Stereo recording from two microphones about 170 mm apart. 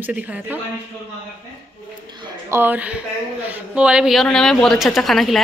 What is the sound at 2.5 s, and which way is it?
Speech, 10° right (ahead or behind).